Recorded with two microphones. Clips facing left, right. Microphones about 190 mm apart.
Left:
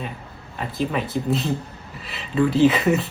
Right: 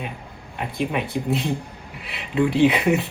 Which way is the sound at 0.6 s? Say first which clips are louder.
Even; 15° right (ahead or behind).